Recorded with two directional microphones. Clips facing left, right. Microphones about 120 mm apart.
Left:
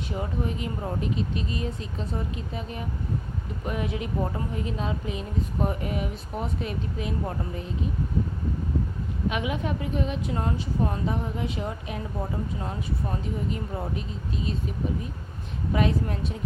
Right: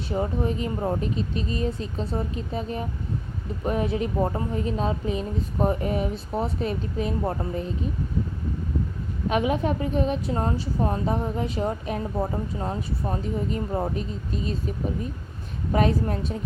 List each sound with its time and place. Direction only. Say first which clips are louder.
0.2 s a woman's voice: right 5 dB; 35° right (ahead or behind)
9.3 s a woman's voice: right 9 dB; 40° right (ahead or behind)
15.7 s a woman's voice: right 3 dB; 40° right (ahead or behind)